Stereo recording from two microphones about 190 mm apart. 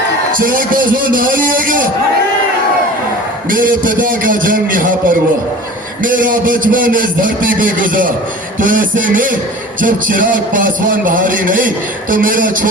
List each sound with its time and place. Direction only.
0.3 s a man's voice: 45° right (ahead or behind)
3.5 s a man's voice: 45° right (ahead or behind)